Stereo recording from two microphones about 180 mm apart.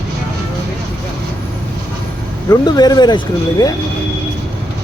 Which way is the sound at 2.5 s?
20° left (ahead or behind).